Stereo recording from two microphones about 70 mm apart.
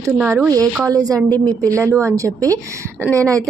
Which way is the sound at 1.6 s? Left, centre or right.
Right.